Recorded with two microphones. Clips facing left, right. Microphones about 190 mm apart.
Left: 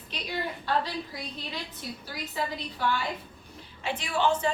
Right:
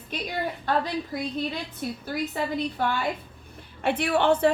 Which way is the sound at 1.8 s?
55° right (ahead or behind).